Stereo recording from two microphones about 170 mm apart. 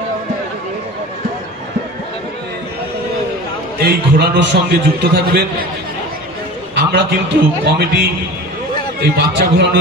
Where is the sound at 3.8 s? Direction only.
75° right (ahead or behind).